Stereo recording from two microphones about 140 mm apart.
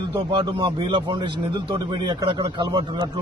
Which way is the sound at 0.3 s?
40° right (ahead or behind).